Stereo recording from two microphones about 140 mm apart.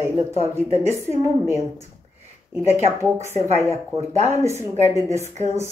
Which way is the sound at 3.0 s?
20° right (ahead or behind).